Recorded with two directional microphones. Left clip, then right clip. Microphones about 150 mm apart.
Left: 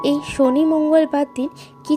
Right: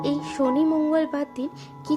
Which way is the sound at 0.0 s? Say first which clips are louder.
Left 7 dB; 30° left (ahead or behind).